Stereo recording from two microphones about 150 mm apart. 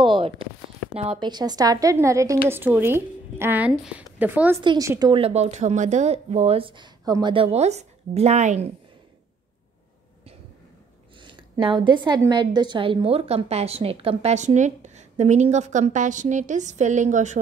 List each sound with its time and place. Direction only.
0.0 s speech: 35° right (ahead or behind)
1.2 s a woman's voice: 30° right (ahead or behind); by 4.6 s 10° right (ahead or behind)
4.6 s a woman's voice: 25° right (ahead or behind)
5.2 s speech: 45° right (ahead or behind)
11.1 s a sound: 30° right (ahead or behind)
12.2 s a woman's voice: 30° right (ahead or behind); by 17.4 s 55° right (ahead or behind)